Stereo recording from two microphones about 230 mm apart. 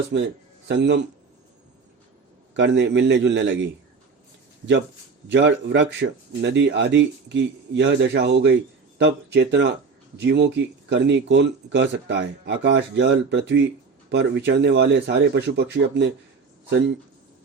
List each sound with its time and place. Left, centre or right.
0.1 s speech: right
2.6 s speech: right
5.3 s speech: right